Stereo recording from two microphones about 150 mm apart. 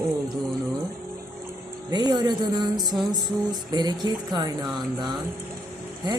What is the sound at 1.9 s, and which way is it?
A woman's voice, 30° right (ahead or behind).